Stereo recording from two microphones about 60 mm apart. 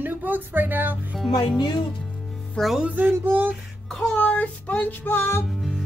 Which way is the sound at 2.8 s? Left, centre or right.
Right.